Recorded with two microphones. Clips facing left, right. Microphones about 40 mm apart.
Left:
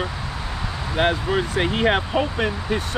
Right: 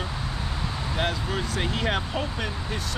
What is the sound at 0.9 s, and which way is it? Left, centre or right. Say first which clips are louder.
Speech: left 9 dB; left.